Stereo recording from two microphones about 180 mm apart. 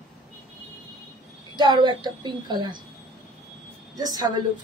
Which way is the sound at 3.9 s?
20° right (ahead or behind).